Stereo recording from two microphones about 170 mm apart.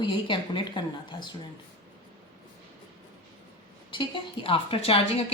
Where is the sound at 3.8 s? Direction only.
30° left (ahead or behind).